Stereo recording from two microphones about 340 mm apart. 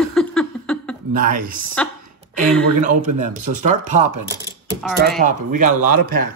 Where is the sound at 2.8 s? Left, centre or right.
Right.